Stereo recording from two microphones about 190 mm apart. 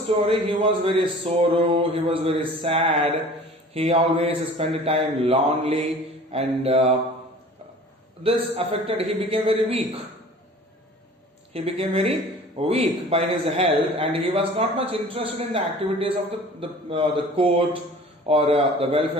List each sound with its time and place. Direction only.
0.3 s a man's voice: 30° right (ahead or behind)
8.2 s a man's voice: 30° right (ahead or behind)
11.5 s a man's voice: 30° right (ahead or behind)